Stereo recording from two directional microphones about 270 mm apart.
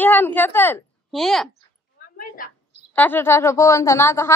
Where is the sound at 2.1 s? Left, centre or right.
Left.